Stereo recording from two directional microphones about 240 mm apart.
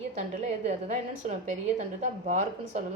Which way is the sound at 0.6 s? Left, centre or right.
Right.